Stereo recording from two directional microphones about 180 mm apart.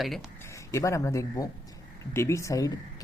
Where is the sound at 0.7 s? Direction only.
15° left (ahead or behind).